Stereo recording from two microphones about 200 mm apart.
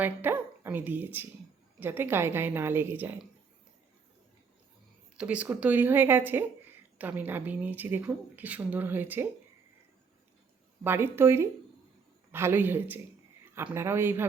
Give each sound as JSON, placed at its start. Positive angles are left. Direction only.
{"t": 0.0, "sound": "speech", "side_deg": -10}
{"t": 5.1, "sound": "speech", "side_deg": -5}
{"t": 10.8, "sound": "speech", "side_deg": -10}